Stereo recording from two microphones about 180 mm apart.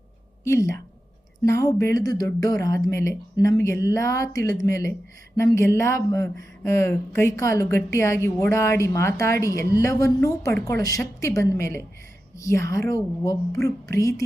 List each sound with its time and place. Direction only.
0.4 s speech: 15° left (ahead or behind)